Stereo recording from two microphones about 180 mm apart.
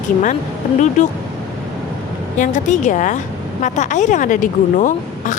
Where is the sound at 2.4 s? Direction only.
45° left (ahead or behind).